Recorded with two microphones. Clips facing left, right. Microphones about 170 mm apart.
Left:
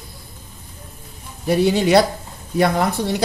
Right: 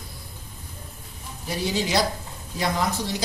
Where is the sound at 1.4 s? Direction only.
60° left (ahead or behind).